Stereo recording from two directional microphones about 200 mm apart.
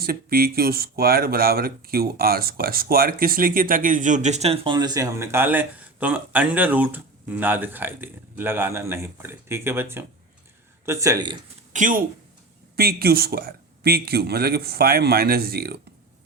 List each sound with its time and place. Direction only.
0.0 s speech: 50° right (ahead or behind); by 11.3 s 20° right (ahead or behind)
11.7 s speech: 40° right (ahead or behind)